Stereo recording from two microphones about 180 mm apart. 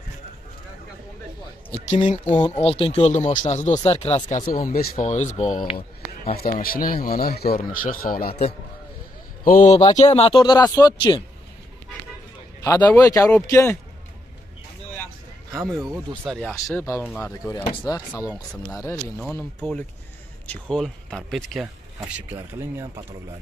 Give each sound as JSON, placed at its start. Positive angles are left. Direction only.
{"t": 1.7, "sound": "speech", "side_deg": 30}
{"t": 6.3, "sound": "speech", "side_deg": 55}
{"t": 9.4, "sound": "speech", "side_deg": 50}
{"t": 9.9, "sound": "speech", "side_deg": 35}
{"t": 12.6, "sound": "speech", "side_deg": 15}
{"t": 16.3, "sound": "speech", "side_deg": 0}
{"t": 16.7, "sound": "speech", "side_deg": 10}
{"t": 18.3, "sound": "speech", "side_deg": 0}